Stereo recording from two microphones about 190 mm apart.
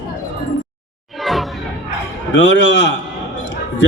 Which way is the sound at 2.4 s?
70° left (ahead or behind).